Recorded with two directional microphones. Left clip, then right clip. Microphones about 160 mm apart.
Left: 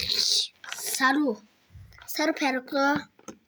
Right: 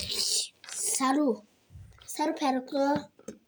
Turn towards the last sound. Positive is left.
turn(degrees=35)  # may be behind; listen again after turning